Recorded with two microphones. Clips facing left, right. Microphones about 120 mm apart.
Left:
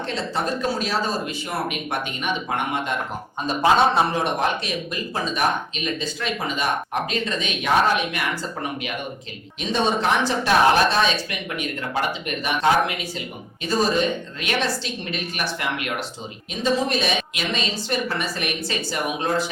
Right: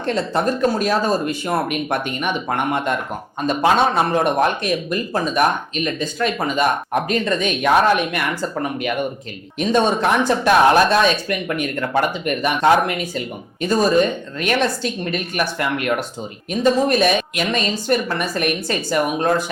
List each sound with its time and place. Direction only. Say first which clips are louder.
0.0 s speech: right 6 dB; 50° right (ahead or behind)